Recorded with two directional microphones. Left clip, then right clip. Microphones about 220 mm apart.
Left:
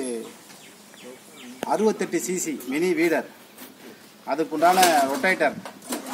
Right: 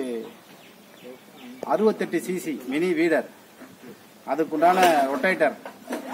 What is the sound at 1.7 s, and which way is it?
Speech, centre (ahead or behind).